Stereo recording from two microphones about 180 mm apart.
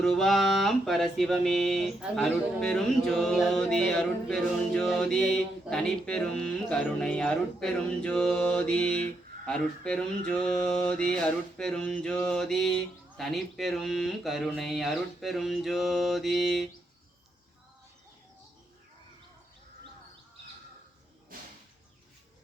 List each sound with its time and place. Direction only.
0.0 s music: centre (ahead or behind)